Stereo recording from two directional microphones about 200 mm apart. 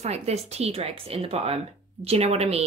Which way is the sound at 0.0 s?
30° right (ahead or behind).